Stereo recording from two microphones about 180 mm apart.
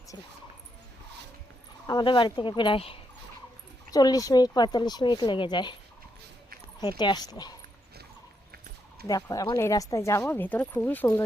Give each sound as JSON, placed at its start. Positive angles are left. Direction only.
{"t": 1.9, "sound": "speech", "side_deg": 25}
{"t": 3.9, "sound": "speech", "side_deg": 20}
{"t": 6.7, "sound": "speech", "side_deg": 25}
{"t": 9.2, "sound": "speech", "side_deg": 20}